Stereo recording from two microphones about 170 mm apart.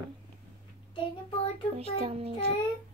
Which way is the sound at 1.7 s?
35° right (ahead or behind).